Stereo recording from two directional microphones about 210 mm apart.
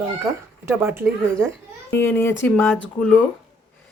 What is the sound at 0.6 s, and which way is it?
Speech, 10° right (ahead or behind).